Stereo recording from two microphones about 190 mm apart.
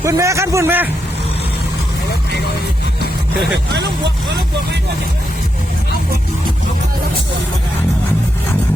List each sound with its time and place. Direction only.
0.0 s a man's voice: 15° right (ahead or behind)
3.7 s speech: 65° right (ahead or behind)